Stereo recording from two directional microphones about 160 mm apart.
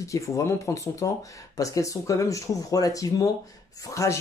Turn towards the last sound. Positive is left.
turn(degrees=20)  # may be behind; listen again after turning